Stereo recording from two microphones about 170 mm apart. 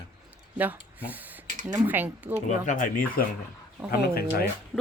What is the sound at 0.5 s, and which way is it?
A woman's voice, 10° right (ahead or behind).